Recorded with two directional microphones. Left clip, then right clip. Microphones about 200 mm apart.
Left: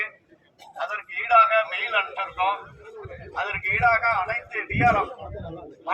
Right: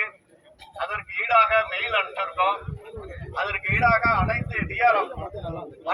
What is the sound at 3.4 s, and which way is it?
A man's voice, 35° right (ahead or behind).